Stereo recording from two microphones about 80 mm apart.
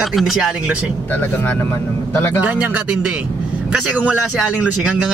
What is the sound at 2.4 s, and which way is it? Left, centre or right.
Speech, right.